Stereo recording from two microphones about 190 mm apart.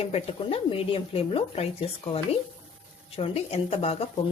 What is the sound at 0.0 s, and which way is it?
Speech, 30° left (ahead or behind).